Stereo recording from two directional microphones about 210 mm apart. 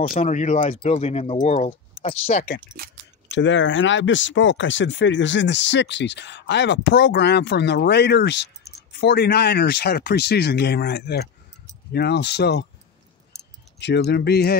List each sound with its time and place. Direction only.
0.0 s speech: 35° left (ahead or behind)
3.3 s speech: 60° left (ahead or behind)